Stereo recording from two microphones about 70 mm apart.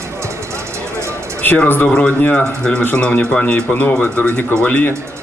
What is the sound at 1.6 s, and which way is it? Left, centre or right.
Speech, left.